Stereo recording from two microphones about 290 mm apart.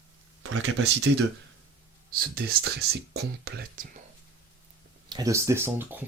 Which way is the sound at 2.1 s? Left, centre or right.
Right.